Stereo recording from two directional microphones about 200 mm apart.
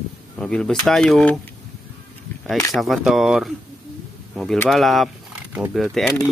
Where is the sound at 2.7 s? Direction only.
Centre (ahead or behind).